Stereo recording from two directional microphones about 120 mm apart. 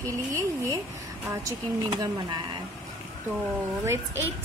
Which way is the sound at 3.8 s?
20° right (ahead or behind).